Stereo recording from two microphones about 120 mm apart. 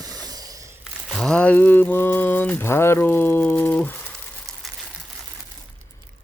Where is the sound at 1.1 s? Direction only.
5° left (ahead or behind).